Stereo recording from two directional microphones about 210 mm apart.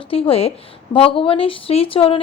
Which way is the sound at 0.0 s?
25° left (ahead or behind).